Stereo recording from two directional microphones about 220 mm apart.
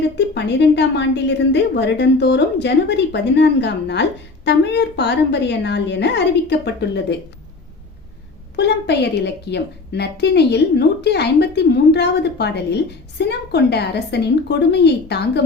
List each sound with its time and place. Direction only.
0.2 s a woman's voice: 50° left (ahead or behind)
8.5 s a woman's voice: 50° left (ahead or behind)